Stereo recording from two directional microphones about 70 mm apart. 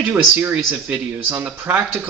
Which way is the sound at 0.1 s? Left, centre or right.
Right.